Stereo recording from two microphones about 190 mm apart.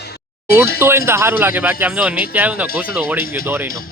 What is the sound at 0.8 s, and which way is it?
Speech, 15° right (ahead or behind).